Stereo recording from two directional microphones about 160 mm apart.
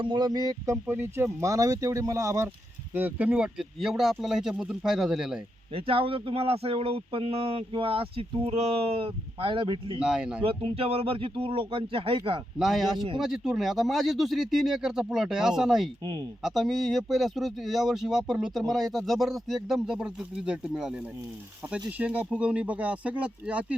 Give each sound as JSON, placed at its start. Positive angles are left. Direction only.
{"t": 0.0, "sound": "speech", "side_deg": -30}
{"t": 5.7, "sound": "speech", "side_deg": -35}
{"t": 10.0, "sound": "speech", "side_deg": -5}
{"t": 10.4, "sound": "speech", "side_deg": -35}
{"t": 12.5, "sound": "speech", "side_deg": 0}